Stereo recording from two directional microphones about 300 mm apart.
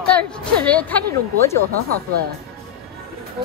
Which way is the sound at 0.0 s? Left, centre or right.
Centre.